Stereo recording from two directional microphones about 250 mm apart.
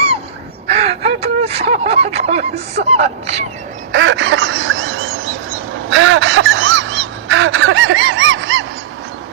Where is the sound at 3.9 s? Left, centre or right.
Right.